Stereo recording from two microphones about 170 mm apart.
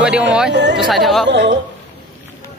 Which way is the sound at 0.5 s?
90° right.